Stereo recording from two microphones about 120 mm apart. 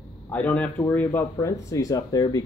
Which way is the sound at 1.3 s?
25° left (ahead or behind).